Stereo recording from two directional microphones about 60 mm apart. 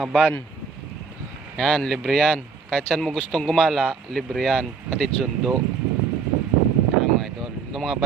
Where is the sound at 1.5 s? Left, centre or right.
Centre.